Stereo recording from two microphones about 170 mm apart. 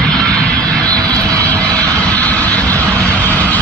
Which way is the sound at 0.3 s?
5° left (ahead or behind).